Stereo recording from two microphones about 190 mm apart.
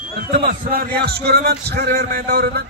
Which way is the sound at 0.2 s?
50° right (ahead or behind).